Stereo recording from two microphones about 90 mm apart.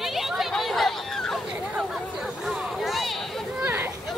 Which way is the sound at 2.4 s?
Centre (ahead or behind).